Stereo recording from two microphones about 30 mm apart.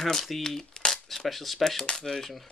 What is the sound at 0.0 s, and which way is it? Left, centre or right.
Speech, centre.